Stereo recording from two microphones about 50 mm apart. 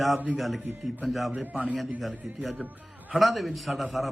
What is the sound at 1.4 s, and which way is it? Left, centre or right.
Speech, right.